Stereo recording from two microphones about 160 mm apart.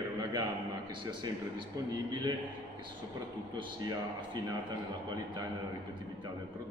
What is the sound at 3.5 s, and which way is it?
A man's voice, 25° right (ahead or behind).